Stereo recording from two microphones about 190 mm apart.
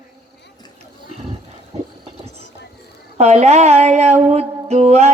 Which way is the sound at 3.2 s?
35° right (ahead or behind).